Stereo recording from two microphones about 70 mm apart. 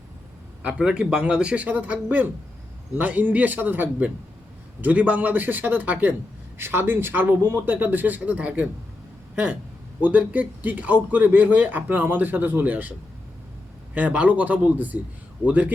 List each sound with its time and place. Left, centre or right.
0.6 s a man's voice: centre; by 7.3 s right
7.4 s speech: right
7.7 s a man's voice: right
13.9 s a man's voice: right